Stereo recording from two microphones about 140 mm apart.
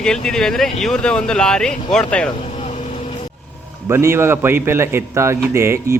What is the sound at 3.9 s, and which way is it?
A man's voice, 20° right (ahead or behind).